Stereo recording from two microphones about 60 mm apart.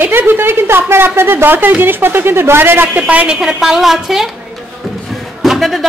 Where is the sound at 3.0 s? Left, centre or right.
Right.